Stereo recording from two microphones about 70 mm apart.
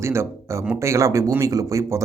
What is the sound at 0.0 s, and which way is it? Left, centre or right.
A man's voice, right.